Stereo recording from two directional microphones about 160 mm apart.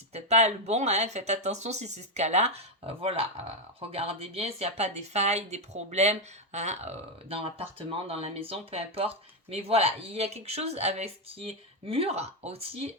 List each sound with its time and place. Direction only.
0.1 s speech: 40° right (ahead or behind)